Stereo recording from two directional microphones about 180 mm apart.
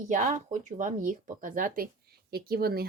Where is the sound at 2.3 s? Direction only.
60° right (ahead or behind).